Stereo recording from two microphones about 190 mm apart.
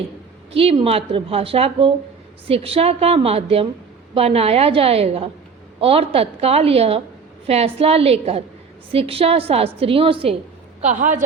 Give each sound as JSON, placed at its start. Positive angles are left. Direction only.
{"t": 0.5, "sound": "a woman's voice", "side_deg": -30}
{"t": 10.8, "sound": "a woman's voice", "side_deg": -40}